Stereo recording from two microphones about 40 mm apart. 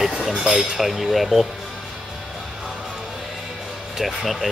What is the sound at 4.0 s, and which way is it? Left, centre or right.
Speech, centre.